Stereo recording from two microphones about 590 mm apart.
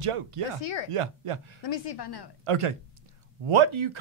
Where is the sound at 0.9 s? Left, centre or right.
Right.